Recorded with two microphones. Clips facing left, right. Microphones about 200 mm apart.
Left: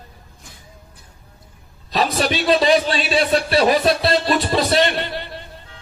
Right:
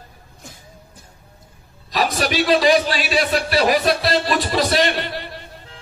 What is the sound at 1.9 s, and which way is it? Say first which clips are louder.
Speech: even; 25° left (ahead or behind).